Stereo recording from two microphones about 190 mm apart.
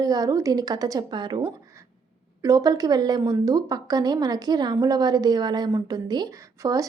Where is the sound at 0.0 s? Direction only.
20° right (ahead or behind).